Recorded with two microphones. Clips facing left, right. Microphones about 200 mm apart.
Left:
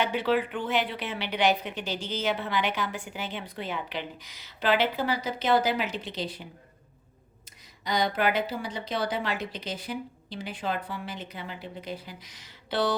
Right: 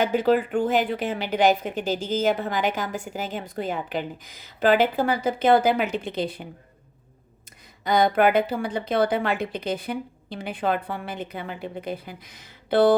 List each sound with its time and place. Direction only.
0.0 s a woman's voice: 45° right (ahead or behind)
7.9 s speech: 55° right (ahead or behind)